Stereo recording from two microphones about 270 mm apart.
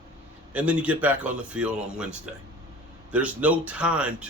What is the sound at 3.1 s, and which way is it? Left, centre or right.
Speech, centre.